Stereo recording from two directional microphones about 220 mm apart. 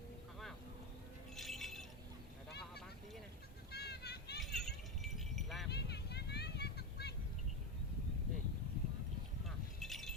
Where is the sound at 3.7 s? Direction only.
45° left (ahead or behind).